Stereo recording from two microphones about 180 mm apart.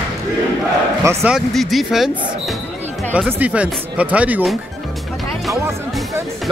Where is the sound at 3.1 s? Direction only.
5° right (ahead or behind).